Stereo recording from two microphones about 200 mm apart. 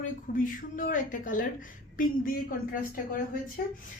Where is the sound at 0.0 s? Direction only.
40° left (ahead or behind).